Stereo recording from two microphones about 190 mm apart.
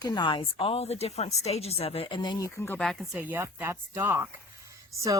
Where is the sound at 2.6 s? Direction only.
10° left (ahead or behind); by 4.3 s 10° right (ahead or behind).